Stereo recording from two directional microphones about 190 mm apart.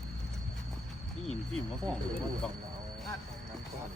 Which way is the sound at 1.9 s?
Centre (ahead or behind).